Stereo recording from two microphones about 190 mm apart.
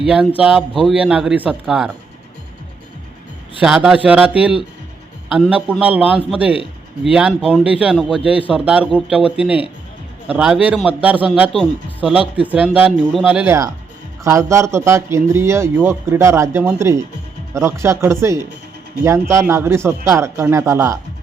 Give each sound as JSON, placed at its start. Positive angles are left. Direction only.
{"t": 0.0, "sound": "speech", "side_deg": -5}
{"t": 3.6, "sound": "a man's voice", "side_deg": -5}
{"t": 8.2, "sound": "speech", "side_deg": 30}
{"t": 8.4, "sound": "a man's voice", "side_deg": -5}